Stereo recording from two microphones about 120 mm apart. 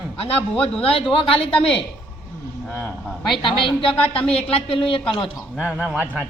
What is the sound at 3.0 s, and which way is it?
Speech, centre (ahead or behind).